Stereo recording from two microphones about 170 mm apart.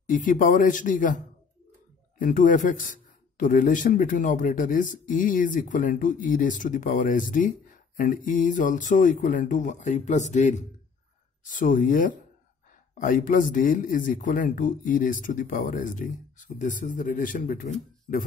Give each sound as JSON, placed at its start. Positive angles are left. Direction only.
{"t": 0.1, "sound": "speech", "side_deg": 50}